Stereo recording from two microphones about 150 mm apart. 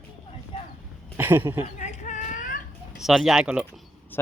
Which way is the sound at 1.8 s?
55° left (ahead or behind).